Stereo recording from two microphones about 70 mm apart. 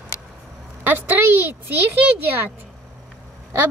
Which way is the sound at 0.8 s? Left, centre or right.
Right.